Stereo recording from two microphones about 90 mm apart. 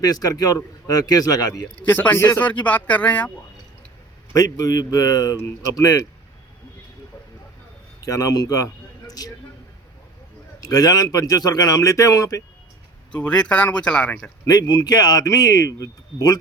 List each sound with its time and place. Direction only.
0.0 s speech: 45° left (ahead or behind)
1.8 s speech: 20° left (ahead or behind)
4.4 s speech: 40° left (ahead or behind)
8.0 s speech: 40° left (ahead or behind)
10.6 s speech: 45° left (ahead or behind)
13.1 s speech: 15° left (ahead or behind)
14.4 s speech: 50° left (ahead or behind)